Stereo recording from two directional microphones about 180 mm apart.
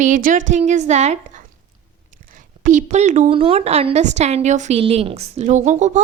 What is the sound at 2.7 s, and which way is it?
A woman's voice, 40° right (ahead or behind).